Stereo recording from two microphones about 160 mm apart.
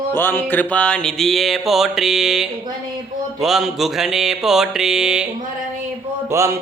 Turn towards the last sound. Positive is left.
turn(degrees=-15)  # may be behind; listen again after turning